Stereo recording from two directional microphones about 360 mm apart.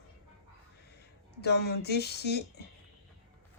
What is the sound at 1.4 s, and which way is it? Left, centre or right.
Speech, left.